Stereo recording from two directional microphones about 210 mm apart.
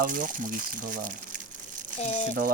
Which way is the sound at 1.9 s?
30° left (ahead or behind).